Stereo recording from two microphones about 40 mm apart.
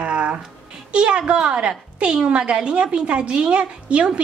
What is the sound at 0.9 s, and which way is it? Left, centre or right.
A woman's voice, right.